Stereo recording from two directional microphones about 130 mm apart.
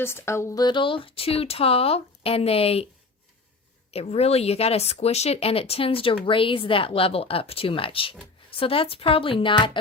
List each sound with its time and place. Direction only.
0.0 s speech: 20° left (ahead or behind)
0.6 s speech: 40° left (ahead or behind)
3.9 s speech: 50° left (ahead or behind)